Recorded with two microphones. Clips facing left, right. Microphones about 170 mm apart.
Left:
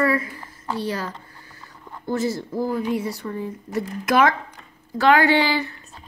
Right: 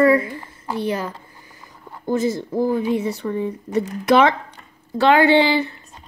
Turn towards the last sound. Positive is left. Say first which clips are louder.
# right 4 dB
turn(degrees=-25)  # may be behind; listen again after turning